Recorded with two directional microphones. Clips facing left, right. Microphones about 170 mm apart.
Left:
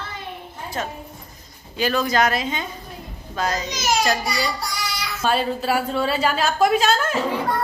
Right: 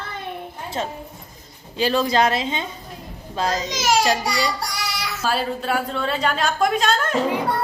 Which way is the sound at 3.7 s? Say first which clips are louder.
Right 2 dB; 90° right.